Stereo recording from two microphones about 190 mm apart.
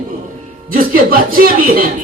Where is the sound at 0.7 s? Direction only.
50° right (ahead or behind).